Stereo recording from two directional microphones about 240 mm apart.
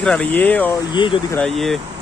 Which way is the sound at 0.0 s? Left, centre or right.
Centre.